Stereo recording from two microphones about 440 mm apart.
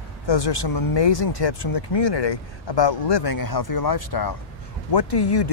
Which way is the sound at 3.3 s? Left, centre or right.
Left.